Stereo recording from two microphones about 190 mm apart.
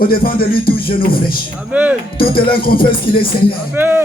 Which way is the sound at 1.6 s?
5° right (ahead or behind).